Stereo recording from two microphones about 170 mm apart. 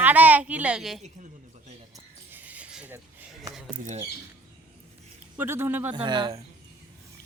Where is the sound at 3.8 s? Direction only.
40° right (ahead or behind).